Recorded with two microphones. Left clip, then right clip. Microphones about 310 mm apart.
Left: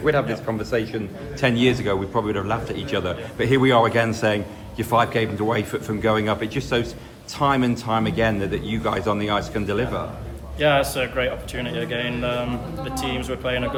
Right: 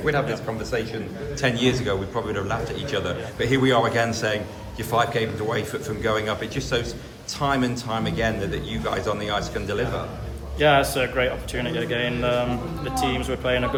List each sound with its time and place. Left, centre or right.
0.0 s a man's voice: left
10.6 s speech: centre